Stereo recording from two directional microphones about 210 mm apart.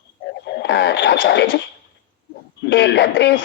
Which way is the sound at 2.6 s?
60° left (ahead or behind).